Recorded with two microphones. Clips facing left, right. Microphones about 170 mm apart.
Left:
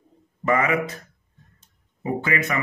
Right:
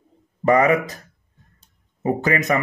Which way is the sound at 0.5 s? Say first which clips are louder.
Right 5 dB; 35° right (ahead or behind).